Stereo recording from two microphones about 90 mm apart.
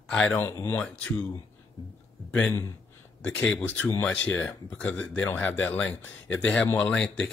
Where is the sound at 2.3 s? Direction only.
15° left (ahead or behind).